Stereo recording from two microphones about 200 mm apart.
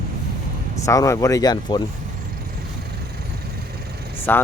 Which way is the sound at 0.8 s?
15° left (ahead or behind).